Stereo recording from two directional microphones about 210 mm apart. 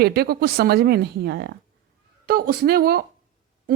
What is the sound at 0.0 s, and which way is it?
Speech, 50° right (ahead or behind).